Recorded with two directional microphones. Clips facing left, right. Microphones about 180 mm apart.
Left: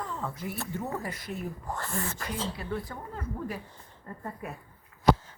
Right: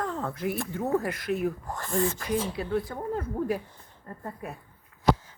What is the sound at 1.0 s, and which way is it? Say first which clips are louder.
Speech: right 8 dB; 80° right.